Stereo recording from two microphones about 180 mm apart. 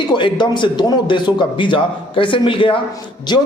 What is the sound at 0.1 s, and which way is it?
A man's voice, 25° left (ahead or behind).